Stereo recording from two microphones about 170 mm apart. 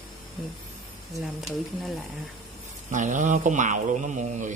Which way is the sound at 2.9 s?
45° right (ahead or behind).